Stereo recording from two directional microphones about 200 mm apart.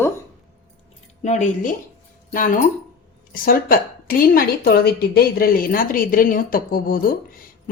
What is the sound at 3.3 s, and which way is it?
A woman's voice, 45° left (ahead or behind).